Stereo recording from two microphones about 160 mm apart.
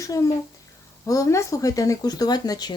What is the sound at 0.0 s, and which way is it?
A child's voice, 20° left (ahead or behind).